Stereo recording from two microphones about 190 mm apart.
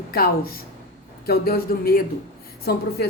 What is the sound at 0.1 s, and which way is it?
A woman's voice, 50° left (ahead or behind).